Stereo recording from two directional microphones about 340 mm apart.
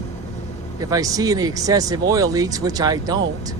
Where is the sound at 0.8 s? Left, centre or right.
Centre.